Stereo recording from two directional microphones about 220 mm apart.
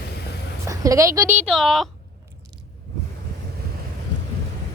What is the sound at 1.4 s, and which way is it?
Speech, centre (ahead or behind).